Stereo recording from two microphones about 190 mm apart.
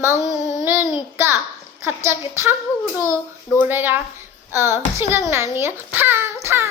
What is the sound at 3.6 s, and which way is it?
Child singing, 10° right (ahead or behind).